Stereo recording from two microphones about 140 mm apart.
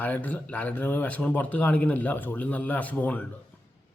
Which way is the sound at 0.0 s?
10° left (ahead or behind).